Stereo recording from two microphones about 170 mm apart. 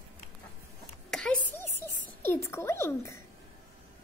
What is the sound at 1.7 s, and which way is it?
A child's voice, 15° left (ahead or behind).